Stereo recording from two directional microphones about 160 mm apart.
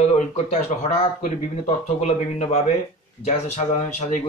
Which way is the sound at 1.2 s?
45° left (ahead or behind).